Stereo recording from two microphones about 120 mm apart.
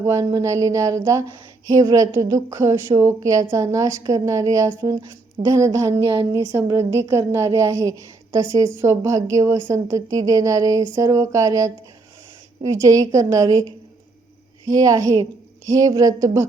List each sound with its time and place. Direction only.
0.0 s a woman's voice: 25° right (ahead or behind)